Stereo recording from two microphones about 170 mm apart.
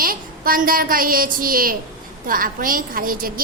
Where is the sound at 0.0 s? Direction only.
55° right (ahead or behind).